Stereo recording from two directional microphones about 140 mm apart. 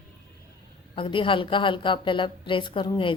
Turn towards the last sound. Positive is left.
turn(degrees=35)  # may be behind; listen again after turning